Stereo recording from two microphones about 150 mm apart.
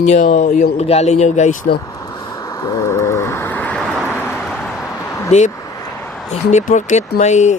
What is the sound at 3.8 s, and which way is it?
Vehicle, 5° right (ahead or behind).